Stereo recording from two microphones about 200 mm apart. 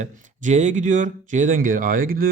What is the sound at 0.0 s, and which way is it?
Speech, 35° right (ahead or behind).